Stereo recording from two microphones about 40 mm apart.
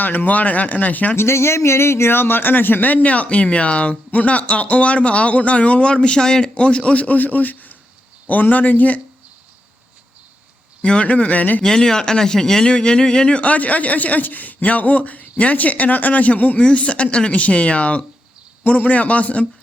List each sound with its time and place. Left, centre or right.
0.0 s speech: left
1.1 s a man's voice: left
3.1 s speech: left
6.6 s speech: left
10.8 s speech: left
11.6 s speech: centre; by 16.6 s left
16.6 s speech: left